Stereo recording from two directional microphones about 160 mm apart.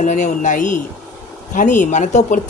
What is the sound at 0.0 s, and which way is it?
Speech, 50° left (ahead or behind).